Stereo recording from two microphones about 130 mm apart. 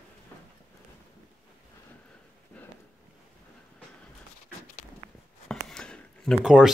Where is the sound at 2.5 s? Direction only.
10° left (ahead or behind).